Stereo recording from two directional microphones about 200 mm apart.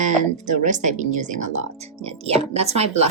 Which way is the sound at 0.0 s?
40° right (ahead or behind).